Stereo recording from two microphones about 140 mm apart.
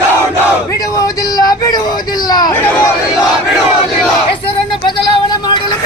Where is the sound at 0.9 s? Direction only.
25° left (ahead or behind).